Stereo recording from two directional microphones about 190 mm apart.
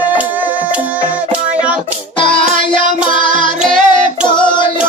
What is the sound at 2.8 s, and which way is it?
Music, 40° right (ahead or behind).